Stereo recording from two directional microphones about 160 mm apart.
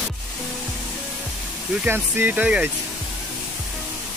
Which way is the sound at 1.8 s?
10° right (ahead or behind).